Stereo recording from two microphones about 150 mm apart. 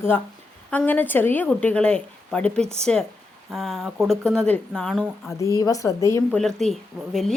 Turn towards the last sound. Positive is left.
turn(degrees=-5)  # may be behind; listen again after turning